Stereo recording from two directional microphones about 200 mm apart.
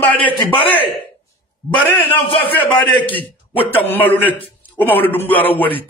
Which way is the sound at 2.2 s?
25° left (ahead or behind).